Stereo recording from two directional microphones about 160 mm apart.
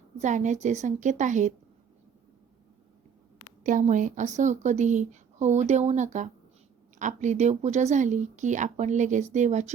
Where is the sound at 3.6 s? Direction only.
50° right (ahead or behind).